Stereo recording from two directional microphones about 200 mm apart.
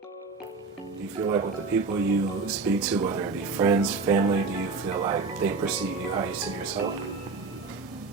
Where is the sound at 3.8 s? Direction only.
5° right (ahead or behind).